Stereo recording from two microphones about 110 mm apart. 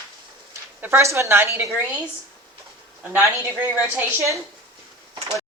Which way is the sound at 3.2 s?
25° right (ahead or behind).